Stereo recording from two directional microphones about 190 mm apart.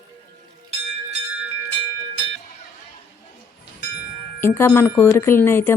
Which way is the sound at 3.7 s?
55° left (ahead or behind).